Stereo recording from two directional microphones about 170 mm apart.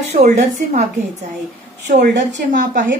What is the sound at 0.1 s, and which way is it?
Speech, 45° right (ahead or behind).